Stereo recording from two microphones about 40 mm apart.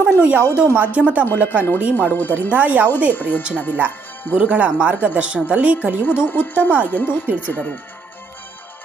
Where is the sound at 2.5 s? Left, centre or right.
Right.